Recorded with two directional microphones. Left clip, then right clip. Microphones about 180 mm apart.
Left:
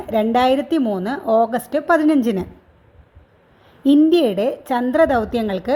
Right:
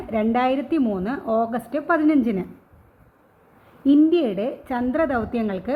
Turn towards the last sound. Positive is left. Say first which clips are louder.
# left 5 dB
turn(degrees=45)  # may be behind; listen again after turning